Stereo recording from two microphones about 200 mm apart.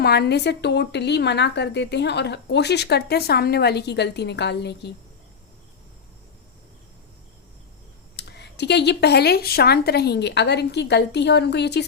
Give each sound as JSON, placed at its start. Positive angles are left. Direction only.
{"t": 0.0, "sound": "a woman's voice", "side_deg": 55}
{"t": 8.1, "sound": "a woman's voice", "side_deg": 55}